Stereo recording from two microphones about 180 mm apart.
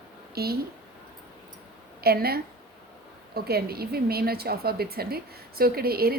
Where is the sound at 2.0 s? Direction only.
60° right (ahead or behind).